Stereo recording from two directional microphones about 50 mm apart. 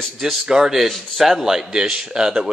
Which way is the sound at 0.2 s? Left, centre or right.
Centre.